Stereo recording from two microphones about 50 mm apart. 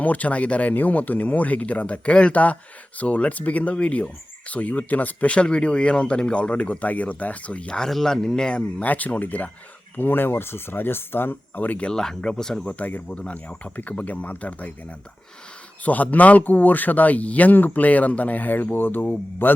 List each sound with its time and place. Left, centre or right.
0.0 s speech: left
0.7 s speech: left
7.7 s speech: centre
8.9 s speech: left
10.0 s speech: left
11.9 s speech: centre
12.6 s speech: left